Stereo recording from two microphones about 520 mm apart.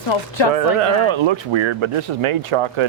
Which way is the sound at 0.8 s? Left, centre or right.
Right.